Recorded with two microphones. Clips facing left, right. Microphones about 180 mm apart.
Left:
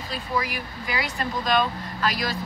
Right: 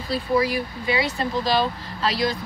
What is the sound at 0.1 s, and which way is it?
Speech, 35° right (ahead or behind).